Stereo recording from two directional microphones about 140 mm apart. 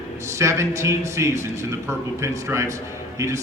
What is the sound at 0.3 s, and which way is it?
A man's voice, 20° right (ahead or behind).